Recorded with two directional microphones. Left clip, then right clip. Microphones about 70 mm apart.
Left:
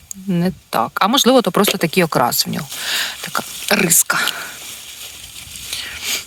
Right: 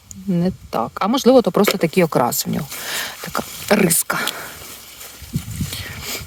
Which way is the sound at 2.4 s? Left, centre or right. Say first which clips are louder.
Left 4 dB; right.